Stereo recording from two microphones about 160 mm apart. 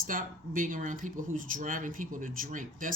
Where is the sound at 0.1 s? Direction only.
60° right (ahead or behind).